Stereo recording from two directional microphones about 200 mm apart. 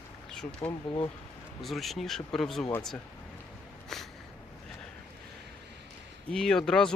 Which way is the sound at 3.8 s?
Centre (ahead or behind).